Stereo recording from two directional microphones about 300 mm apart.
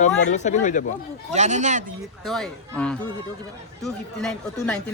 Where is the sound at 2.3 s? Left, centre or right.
Centre.